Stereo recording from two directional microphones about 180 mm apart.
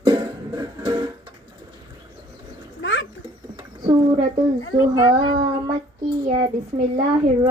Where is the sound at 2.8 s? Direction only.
90° left.